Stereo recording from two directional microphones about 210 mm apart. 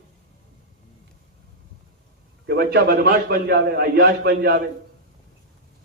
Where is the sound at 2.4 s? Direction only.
50° right (ahead or behind).